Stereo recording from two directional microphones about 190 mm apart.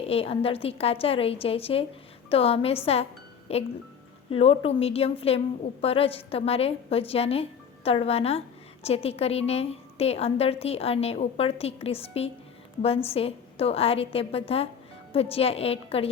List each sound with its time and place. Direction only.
0.1 s a woman's voice: 30° left (ahead or behind)